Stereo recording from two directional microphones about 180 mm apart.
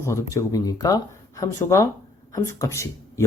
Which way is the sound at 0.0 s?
15° left (ahead or behind).